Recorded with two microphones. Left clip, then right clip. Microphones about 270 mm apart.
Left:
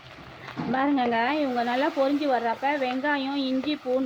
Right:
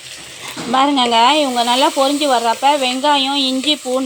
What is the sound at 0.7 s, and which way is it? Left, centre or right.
Speech, right.